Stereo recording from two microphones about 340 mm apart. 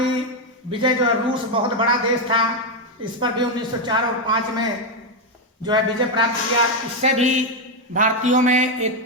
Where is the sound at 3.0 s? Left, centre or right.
Centre.